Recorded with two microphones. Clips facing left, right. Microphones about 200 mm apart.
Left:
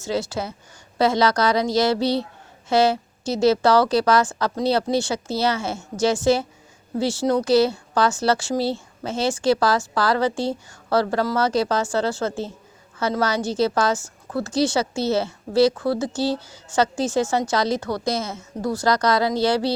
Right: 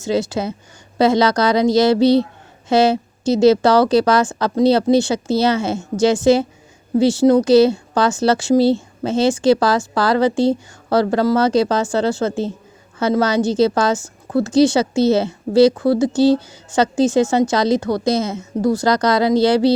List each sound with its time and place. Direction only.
0.0 s speech: 15° right (ahead or behind)